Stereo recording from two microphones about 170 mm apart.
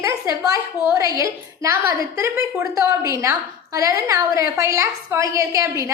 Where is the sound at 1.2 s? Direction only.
15° right (ahead or behind).